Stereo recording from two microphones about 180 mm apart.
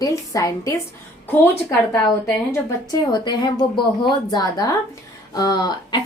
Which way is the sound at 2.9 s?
20° left (ahead or behind).